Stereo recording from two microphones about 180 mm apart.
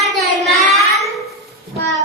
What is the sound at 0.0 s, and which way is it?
Child singing, centre (ahead or behind).